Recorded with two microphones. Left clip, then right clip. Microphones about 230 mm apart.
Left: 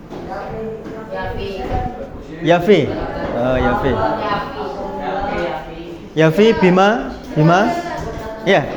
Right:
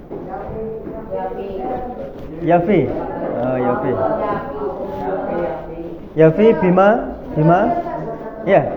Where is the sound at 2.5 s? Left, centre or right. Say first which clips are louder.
Left 2 dB; left.